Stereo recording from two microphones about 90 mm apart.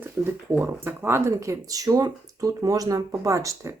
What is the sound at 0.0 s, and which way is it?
Speech, 25° right (ahead or behind).